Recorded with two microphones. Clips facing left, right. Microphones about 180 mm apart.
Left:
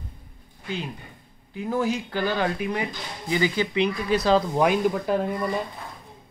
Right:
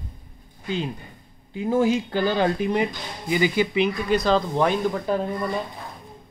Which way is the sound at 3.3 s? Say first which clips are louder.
Right 3 dB; 15° right (ahead or behind).